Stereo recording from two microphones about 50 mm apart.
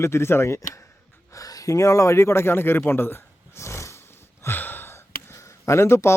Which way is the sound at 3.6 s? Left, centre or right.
Left.